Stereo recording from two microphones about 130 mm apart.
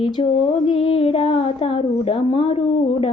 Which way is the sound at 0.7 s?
45° left (ahead or behind).